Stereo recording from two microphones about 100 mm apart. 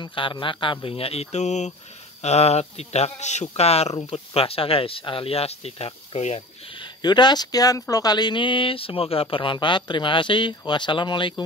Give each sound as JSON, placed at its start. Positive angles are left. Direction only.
{"t": 0.0, "sound": "speech", "side_deg": 55}
{"t": 3.9, "sound": "speech", "side_deg": 60}
{"t": 7.0, "sound": "speech", "side_deg": 45}